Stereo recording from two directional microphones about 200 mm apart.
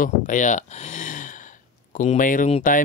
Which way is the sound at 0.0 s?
40° left (ahead or behind).